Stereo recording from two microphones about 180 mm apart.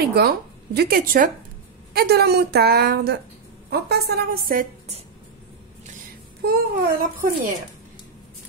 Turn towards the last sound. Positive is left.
turn(degrees=-50)  # may be behind; listen again after turning